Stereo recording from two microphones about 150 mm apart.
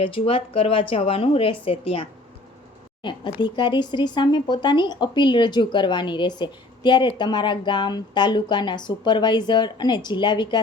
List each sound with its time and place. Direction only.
0.0 s a woman's voice: 35° left (ahead or behind)